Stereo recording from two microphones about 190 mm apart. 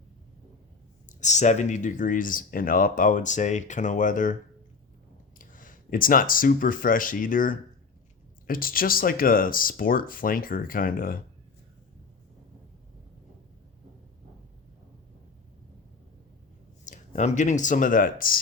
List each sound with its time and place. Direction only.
1.0 s speech: 40° left (ahead or behind)
5.4 s speech: 45° left (ahead or behind)
16.8 s speech: 40° left (ahead or behind)